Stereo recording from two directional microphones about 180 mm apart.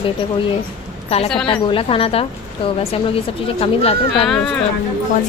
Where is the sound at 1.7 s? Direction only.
30° left (ahead or behind).